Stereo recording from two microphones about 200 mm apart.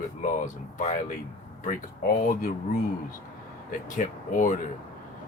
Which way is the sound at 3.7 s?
40° left (ahead or behind).